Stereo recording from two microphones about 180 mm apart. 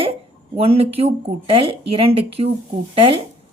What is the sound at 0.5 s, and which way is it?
A woman's voice, 35° right (ahead or behind).